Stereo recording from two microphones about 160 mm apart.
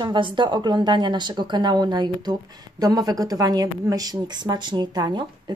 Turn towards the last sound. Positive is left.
turn(degrees=-25)  # may be behind; listen again after turning